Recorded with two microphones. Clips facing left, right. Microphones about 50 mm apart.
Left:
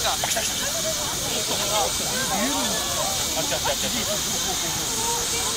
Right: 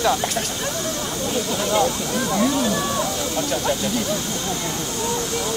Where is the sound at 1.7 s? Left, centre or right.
Right.